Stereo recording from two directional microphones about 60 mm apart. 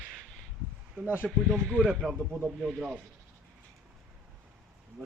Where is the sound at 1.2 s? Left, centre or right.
Centre.